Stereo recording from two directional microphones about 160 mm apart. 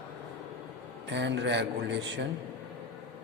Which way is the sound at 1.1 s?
90° right.